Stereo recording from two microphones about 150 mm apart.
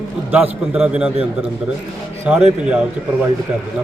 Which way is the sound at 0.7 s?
10° right (ahead or behind).